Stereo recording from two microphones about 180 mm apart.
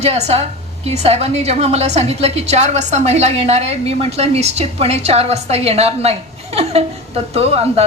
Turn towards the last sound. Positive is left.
turn(degrees=-35)  # may be behind; listen again after turning